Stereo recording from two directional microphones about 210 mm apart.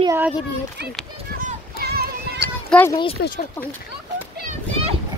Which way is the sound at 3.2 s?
55° left (ahead or behind).